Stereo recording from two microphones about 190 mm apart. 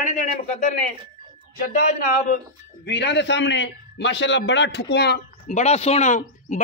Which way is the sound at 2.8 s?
65° left (ahead or behind).